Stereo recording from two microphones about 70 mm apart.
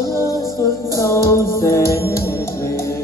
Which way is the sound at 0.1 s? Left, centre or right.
Left.